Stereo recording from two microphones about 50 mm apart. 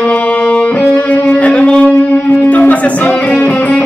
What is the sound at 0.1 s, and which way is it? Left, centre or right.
Music, left.